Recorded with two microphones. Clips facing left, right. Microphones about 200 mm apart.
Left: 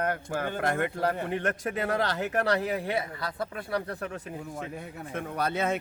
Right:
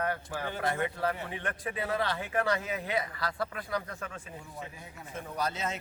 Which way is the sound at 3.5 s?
30° left (ahead or behind).